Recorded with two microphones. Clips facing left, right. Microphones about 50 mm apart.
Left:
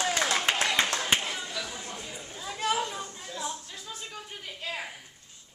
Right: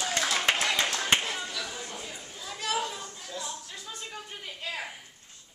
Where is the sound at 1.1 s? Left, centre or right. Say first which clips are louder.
Right 1 dB; centre.